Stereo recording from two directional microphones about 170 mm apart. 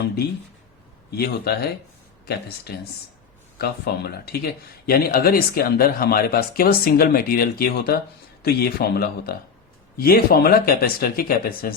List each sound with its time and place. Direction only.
1.1 s speech: 70° left (ahead or behind)